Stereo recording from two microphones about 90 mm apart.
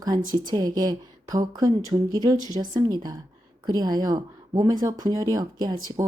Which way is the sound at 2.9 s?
50° right (ahead or behind).